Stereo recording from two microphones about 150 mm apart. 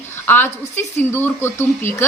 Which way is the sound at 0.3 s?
15° left (ahead or behind).